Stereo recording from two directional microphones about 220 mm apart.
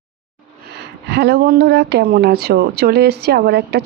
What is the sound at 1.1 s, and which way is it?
A woman's voice, 50° right (ahead or behind).